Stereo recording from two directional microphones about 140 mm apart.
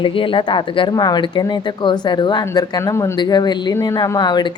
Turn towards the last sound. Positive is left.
turn(degrees=30)  # may be behind; listen again after turning